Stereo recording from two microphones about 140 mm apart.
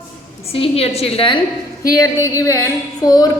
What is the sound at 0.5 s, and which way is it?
Speech, 45° left (ahead or behind).